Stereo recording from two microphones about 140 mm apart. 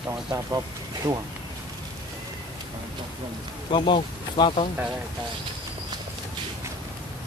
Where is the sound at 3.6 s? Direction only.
40° left (ahead or behind).